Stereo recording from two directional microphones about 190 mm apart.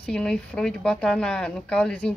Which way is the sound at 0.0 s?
5° left (ahead or behind).